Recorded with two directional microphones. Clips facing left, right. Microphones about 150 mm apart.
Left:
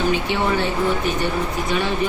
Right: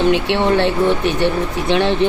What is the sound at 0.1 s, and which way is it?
Speech, 70° right (ahead or behind).